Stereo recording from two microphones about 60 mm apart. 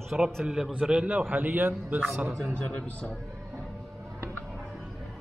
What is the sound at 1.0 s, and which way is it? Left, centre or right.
A man's voice, right.